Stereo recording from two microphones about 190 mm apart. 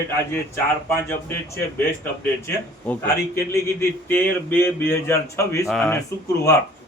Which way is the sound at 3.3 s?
15° left (ahead or behind).